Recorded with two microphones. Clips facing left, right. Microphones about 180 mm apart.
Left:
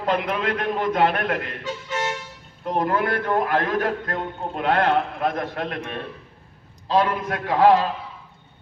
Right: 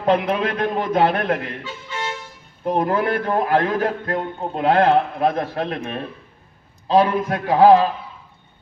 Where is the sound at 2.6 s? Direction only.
25° right (ahead or behind).